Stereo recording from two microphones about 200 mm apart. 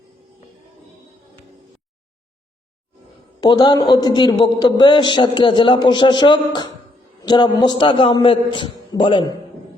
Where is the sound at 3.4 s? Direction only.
20° left (ahead or behind).